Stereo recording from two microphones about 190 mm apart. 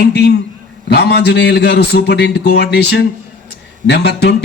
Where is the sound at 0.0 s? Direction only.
60° left (ahead or behind).